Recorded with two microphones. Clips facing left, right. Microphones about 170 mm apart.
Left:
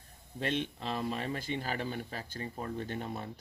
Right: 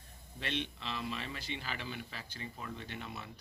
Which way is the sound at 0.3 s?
45° left (ahead or behind).